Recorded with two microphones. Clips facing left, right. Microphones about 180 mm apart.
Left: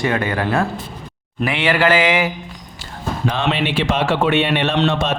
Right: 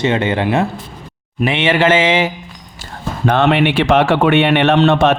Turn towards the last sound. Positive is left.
turn(degrees=-60)  # may be behind; listen again after turning